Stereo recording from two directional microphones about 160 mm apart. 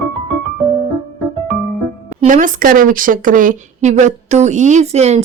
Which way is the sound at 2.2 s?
55° right (ahead or behind).